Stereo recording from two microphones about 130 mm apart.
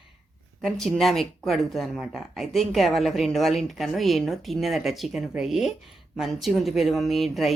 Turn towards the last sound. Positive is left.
turn(degrees=0)  # may be behind; listen again after turning